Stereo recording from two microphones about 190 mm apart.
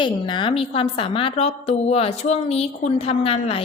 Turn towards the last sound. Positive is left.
turn(degrees=30)  # may be behind; listen again after turning